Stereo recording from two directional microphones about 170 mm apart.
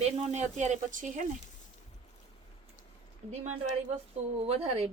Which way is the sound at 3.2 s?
45° right (ahead or behind).